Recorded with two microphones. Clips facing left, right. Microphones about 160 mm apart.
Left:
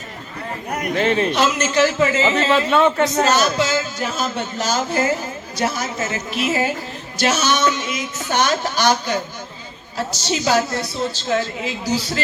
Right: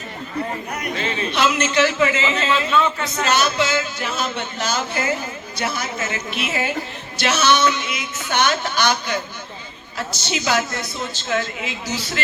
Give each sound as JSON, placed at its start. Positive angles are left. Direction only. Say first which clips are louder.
{"t": 0.7, "sound": "speech", "louder": "left 6 dB", "side_deg": 50}
{"t": 1.3, "sound": "a man's voice", "louder": "left 1 dB", "side_deg": 40}